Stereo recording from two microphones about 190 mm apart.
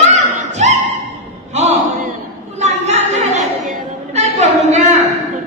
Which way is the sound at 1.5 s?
35° right (ahead or behind).